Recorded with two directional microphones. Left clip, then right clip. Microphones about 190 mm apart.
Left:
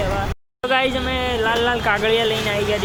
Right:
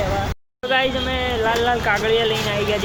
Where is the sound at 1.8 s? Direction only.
45° left (ahead or behind).